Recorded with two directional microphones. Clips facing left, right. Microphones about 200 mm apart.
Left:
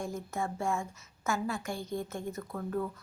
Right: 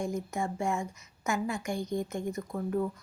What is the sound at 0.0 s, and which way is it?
A woman's voice, 15° right (ahead or behind).